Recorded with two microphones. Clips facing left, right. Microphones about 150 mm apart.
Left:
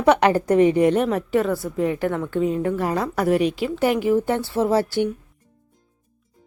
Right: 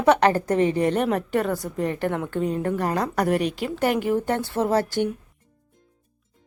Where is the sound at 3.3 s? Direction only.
45° right (ahead or behind).